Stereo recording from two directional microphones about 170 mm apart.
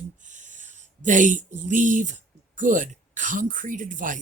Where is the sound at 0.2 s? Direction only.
45° right (ahead or behind).